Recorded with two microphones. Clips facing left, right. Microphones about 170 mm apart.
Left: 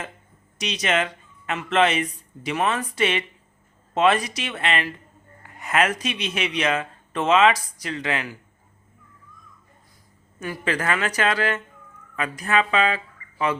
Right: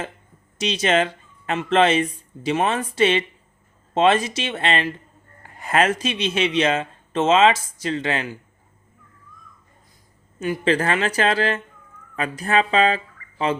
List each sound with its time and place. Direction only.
0.6 s speech: 30° right (ahead or behind)
10.4 s speech: 25° right (ahead or behind)
13.2 s a sound: 25° left (ahead or behind)